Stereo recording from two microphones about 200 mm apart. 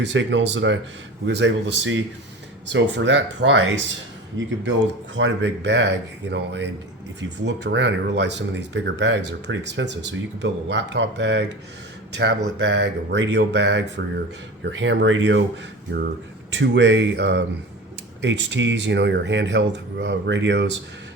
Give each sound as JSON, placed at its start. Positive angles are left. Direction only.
{"t": 0.0, "sound": "speech", "side_deg": -60}
{"t": 16.5, "sound": "speech", "side_deg": -65}